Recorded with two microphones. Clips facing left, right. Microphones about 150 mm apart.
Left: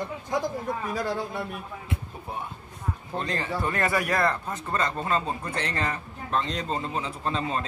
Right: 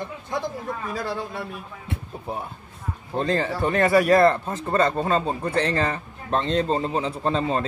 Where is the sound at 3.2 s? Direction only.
30° right (ahead or behind).